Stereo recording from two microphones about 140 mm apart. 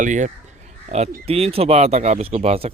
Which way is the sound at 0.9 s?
50° right (ahead or behind).